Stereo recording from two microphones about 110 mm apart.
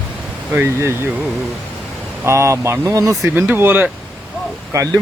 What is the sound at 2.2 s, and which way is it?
Speech, 25° right (ahead or behind).